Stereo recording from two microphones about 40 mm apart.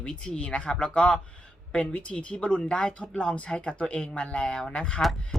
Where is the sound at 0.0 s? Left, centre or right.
Left.